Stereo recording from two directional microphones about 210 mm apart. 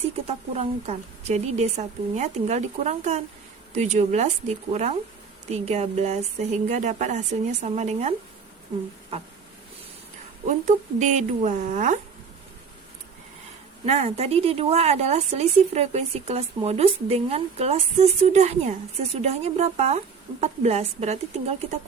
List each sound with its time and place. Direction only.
0.3 s a woman's voice: 30° right (ahead or behind)
9.1 s a woman's voice: 30° right (ahead or behind)
10.4 s a woman's voice: 35° right (ahead or behind)
13.8 s a woman's voice: 30° right (ahead or behind)